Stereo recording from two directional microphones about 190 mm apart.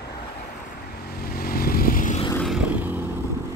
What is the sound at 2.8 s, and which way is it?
Vehicle, 10° right (ahead or behind).